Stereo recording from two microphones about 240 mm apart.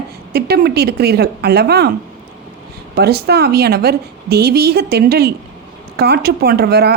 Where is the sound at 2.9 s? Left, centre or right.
Right.